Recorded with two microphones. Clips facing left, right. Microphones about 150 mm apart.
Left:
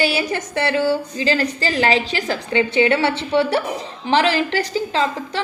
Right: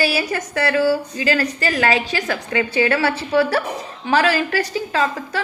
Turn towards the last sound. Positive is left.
turn(degrees=25)  # may be behind; listen again after turning